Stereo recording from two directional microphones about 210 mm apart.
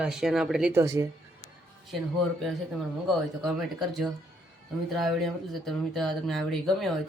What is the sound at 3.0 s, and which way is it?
Speech, centre (ahead or behind).